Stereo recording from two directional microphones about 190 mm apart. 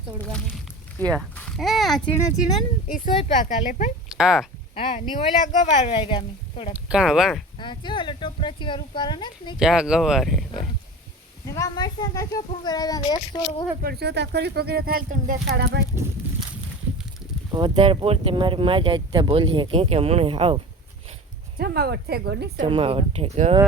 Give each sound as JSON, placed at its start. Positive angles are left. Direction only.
{"t": 0.3, "sound": "speech", "side_deg": 5}
{"t": 3.4, "sound": "a woman's voice", "side_deg": 40}
{"t": 4.1, "sound": "speech", "side_deg": -5}
{"t": 4.7, "sound": "speech", "side_deg": 30}
{"t": 6.7, "sound": "speech", "side_deg": -5}
{"t": 7.6, "sound": "speech", "side_deg": 25}
{"t": 9.6, "sound": "speech", "side_deg": -5}
{"t": 11.4, "sound": "speech", "side_deg": 15}
{"t": 13.8, "sound": "speech", "side_deg": -60}
{"t": 15.6, "sound": "speech", "side_deg": -65}
{"t": 17.5, "sound": "speech", "side_deg": -30}
{"t": 21.6, "sound": "speech", "side_deg": -55}
{"t": 22.6, "sound": "speech", "side_deg": -30}